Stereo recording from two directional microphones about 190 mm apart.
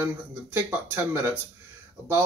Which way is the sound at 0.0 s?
10° right (ahead or behind).